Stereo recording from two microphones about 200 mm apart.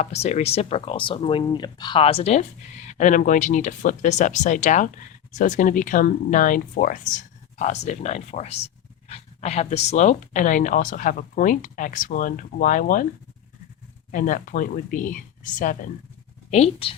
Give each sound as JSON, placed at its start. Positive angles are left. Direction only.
{"t": 0.0, "sound": "speech", "side_deg": 35}
{"t": 14.1, "sound": "speech", "side_deg": 40}
{"t": 16.5, "sound": "speech", "side_deg": 30}